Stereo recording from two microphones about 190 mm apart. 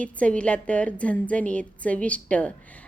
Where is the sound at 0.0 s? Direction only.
5° left (ahead or behind).